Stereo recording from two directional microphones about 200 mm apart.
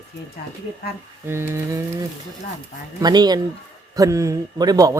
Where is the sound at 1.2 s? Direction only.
10° right (ahead or behind).